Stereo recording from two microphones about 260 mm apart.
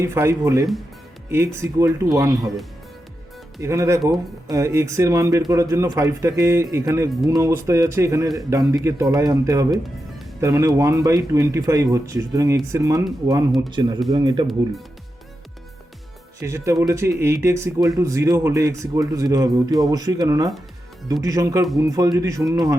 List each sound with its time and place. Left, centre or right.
0.0 s speech: centre
3.6 s speech: centre
16.4 s speech: centre